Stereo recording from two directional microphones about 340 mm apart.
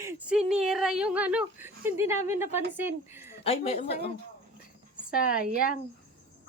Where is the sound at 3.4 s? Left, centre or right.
Centre.